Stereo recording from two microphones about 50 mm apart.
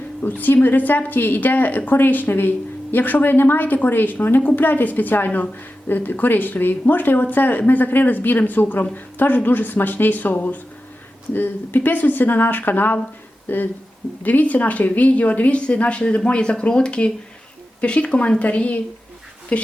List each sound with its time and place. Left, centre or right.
0.2 s a woman's voice: left
14.3 s a woman's voice: left